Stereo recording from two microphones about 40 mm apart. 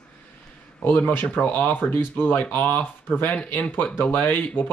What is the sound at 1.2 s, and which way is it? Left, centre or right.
Speech, left.